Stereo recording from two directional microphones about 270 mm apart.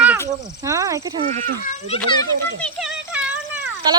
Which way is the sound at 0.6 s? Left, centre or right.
Centre.